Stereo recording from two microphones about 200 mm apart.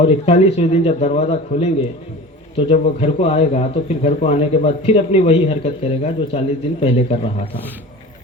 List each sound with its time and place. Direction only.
0.0 s a man's voice: 35° left (ahead or behind)